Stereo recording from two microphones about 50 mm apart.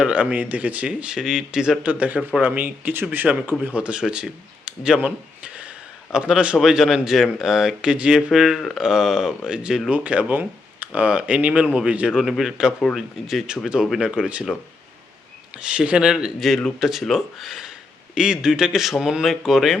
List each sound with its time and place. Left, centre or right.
0.1 s speech: right
0.9 s speech: centre
1.8 s speech: right
3.8 s speech: right
5.0 s a sound: right
6.1 s speech: centre
6.6 s speech: centre
8.3 s speech: centre
9.9 s speech: right
12.1 s speech: centre
14.2 s speech: right
15.5 s speech: right; by 17.7 s centre
17.7 s speech: centre